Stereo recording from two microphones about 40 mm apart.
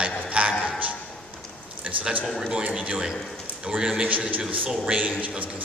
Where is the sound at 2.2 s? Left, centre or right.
Centre.